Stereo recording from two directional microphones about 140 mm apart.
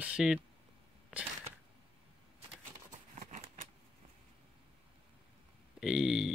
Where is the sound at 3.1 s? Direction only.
55° right (ahead or behind).